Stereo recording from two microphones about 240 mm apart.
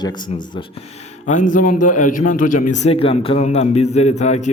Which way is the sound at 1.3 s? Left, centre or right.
Left.